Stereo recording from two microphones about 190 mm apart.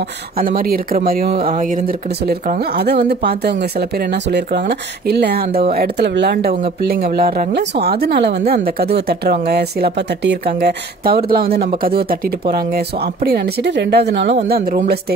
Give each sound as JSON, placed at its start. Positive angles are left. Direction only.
{"t": 0.4, "sound": "speech", "side_deg": -50}
{"t": 14.5, "sound": "speech", "side_deg": -50}